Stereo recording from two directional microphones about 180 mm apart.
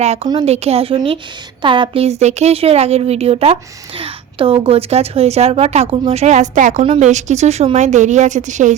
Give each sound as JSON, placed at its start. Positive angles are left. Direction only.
{"t": 0.0, "sound": "speech", "side_deg": -35}